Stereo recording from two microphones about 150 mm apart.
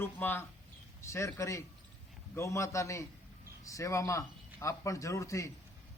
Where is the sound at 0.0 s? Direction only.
15° left (ahead or behind).